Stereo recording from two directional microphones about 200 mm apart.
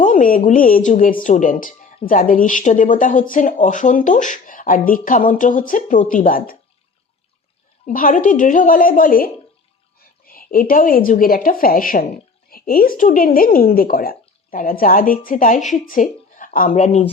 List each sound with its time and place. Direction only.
0.0 s speech: 40° left (ahead or behind)
7.9 s a woman's voice: 40° left (ahead or behind)